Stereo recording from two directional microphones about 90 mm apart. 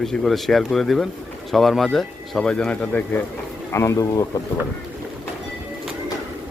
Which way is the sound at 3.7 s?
30° left (ahead or behind).